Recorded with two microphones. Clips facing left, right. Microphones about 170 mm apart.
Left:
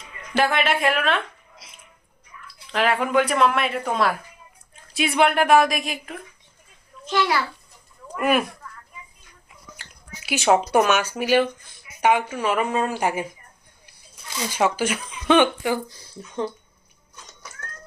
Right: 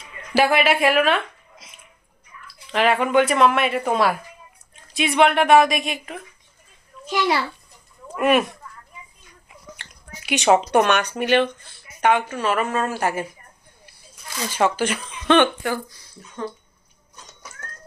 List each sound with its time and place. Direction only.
0.3 s speech: 5° right (ahead or behind)
2.7 s speech: centre (ahead or behind)
8.0 s speech: centre (ahead or behind)
10.2 s speech: centre (ahead or behind)
14.3 s speech: 10° left (ahead or behind)
15.9 s speech: 25° left (ahead or behind)